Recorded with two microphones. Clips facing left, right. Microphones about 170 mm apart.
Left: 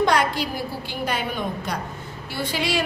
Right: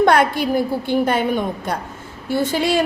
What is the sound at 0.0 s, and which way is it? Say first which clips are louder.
Speech: right 6 dB; 55° right (ahead or behind).